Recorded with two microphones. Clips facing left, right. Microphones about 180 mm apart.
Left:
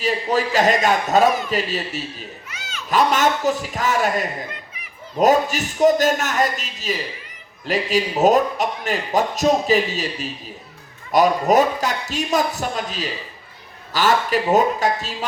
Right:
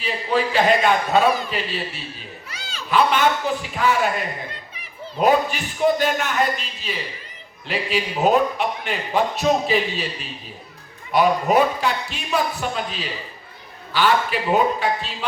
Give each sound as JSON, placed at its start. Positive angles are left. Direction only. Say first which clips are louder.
{"t": 0.0, "sound": "a man's voice", "louder": "left 2 dB", "side_deg": 40}
{"t": 2.5, "sound": "goat", "louder": "left 1 dB", "side_deg": -35}
{"t": 2.9, "sound": "a man's voice", "louder": "even", "side_deg": 40}
{"t": 11.1, "sound": "a man's voice", "louder": "left 2 dB", "side_deg": 40}